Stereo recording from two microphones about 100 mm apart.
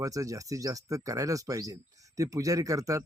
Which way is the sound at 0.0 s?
35° right (ahead or behind).